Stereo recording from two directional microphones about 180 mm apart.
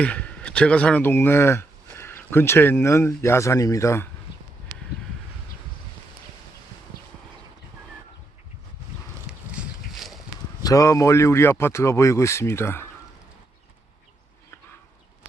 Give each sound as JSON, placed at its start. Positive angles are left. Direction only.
{"t": 0.0, "sound": "speech", "side_deg": 5}
{"t": 9.5, "sound": "a sound", "side_deg": -5}
{"t": 10.6, "sound": "speech", "side_deg": 20}